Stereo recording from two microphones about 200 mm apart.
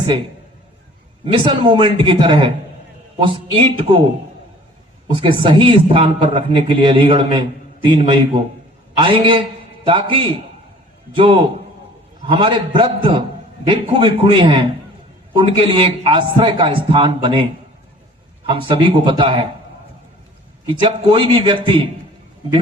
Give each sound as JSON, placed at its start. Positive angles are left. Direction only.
{"t": 1.2, "sound": "a man's voice", "side_deg": -25}
{"t": 20.7, "sound": "a man's voice", "side_deg": -25}